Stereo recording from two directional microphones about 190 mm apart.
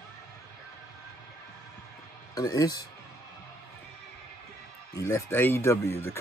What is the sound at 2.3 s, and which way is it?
Speech, 20° left (ahead or behind).